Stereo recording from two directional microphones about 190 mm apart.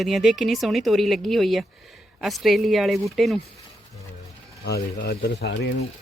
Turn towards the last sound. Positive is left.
turn(degrees=60)  # may be behind; listen again after turning